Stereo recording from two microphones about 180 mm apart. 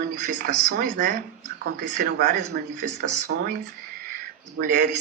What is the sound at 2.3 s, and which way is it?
Speech, 40° right (ahead or behind).